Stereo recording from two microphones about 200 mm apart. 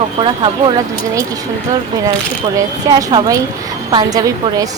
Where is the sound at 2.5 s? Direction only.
20° right (ahead or behind).